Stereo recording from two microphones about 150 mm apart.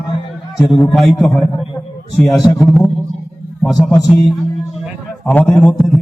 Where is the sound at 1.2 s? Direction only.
Centre (ahead or behind).